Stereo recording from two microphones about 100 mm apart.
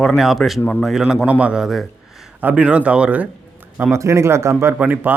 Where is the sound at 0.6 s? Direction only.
20° left (ahead or behind).